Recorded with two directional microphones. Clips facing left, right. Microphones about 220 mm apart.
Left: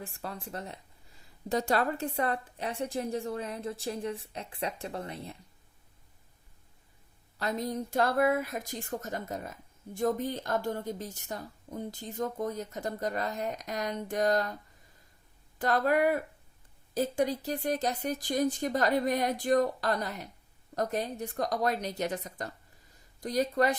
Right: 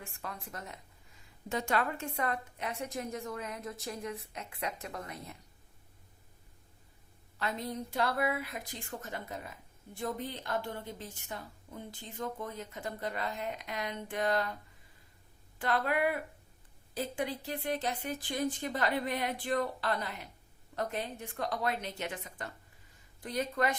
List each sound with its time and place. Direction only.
0.0 s speech: 35° left (ahead or behind)
7.3 s speech: 40° left (ahead or behind)